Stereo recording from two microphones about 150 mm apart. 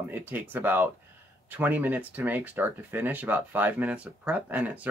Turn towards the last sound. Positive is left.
turn(degrees=-10)  # may be behind; listen again after turning